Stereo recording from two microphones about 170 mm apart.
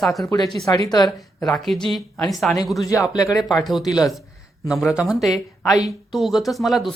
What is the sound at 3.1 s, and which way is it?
Speech, 20° left (ahead or behind).